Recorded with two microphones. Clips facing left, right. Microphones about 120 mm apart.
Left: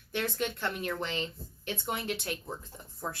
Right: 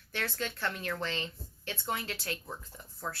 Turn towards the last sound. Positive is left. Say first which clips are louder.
# left 2 dB
turn(degrees=15)  # may be behind; listen again after turning